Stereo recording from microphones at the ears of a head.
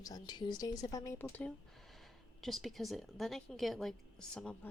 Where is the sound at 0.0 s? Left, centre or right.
Left.